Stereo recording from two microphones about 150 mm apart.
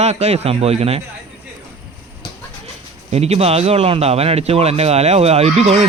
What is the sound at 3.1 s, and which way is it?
Speech, 45° right (ahead or behind).